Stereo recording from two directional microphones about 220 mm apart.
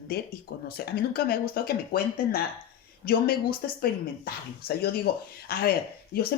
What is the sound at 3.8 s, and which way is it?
Speech, 45° left (ahead or behind).